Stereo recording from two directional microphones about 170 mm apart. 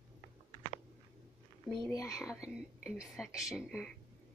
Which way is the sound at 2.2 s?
5° right (ahead or behind).